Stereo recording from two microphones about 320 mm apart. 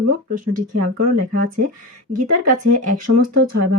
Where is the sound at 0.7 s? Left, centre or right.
Right.